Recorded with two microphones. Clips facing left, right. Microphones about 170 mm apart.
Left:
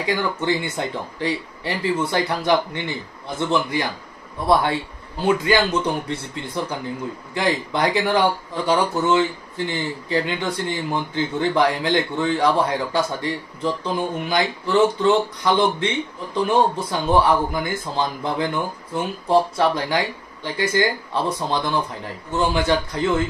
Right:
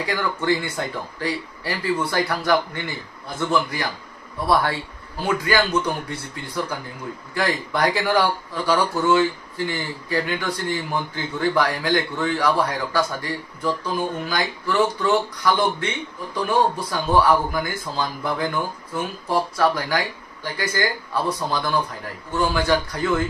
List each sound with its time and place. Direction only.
0.0 s a man's voice: 20° left (ahead or behind)